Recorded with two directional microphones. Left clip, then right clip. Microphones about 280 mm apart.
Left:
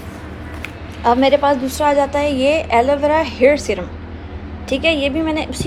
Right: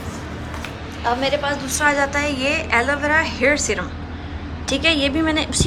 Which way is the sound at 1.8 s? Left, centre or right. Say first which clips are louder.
Right 1 dB; centre.